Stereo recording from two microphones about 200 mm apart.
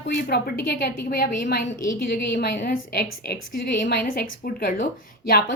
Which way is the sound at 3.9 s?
45° left (ahead or behind).